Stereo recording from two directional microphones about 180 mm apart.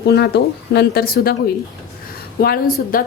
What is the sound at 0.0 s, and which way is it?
A woman's voice, 65° left (ahead or behind).